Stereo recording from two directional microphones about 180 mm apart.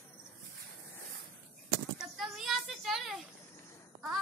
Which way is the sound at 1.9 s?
Centre (ahead or behind).